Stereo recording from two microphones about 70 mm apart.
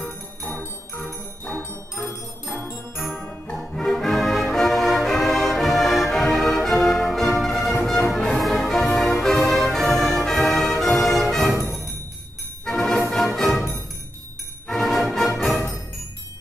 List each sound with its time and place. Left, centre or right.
0.5 s music: left
2.0 s music: left
3.2 s brass instrument: left
3.7 s music: centre
12.6 s music: centre
14.7 s music: centre